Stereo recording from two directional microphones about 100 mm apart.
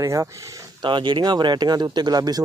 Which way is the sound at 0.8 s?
50° right (ahead or behind).